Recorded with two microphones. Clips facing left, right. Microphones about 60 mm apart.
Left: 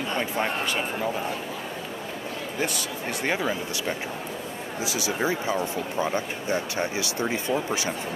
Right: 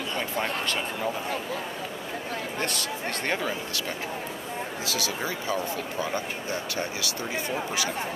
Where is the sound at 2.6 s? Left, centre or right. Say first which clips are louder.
Left 4 dB; centre.